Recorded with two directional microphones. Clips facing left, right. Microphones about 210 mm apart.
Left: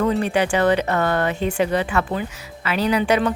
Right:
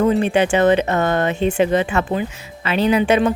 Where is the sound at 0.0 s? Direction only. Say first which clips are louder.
Right 4 dB; 20° right (ahead or behind).